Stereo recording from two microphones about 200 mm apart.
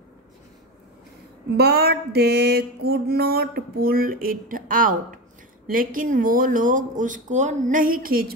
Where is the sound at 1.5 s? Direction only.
50° right (ahead or behind).